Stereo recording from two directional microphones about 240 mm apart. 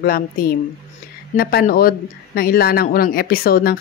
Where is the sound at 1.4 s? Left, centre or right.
Left.